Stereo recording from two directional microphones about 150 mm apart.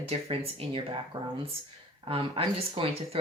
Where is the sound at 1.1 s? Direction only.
25° right (ahead or behind).